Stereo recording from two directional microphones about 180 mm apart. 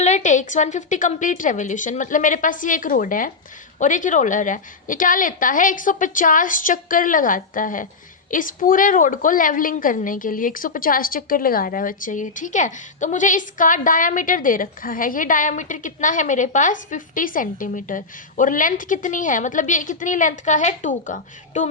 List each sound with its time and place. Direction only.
0.0 s a woman's voice: 40° left (ahead or behind)